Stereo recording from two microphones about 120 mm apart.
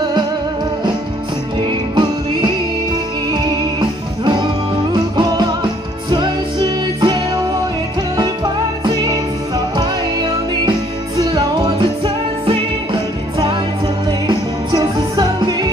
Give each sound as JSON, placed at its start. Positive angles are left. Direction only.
{"t": 1.6, "sound": "music", "side_deg": -40}
{"t": 8.8, "sound": "music", "side_deg": -35}
{"t": 11.1, "sound": "music", "side_deg": -35}
{"t": 12.9, "sound": "music", "side_deg": -40}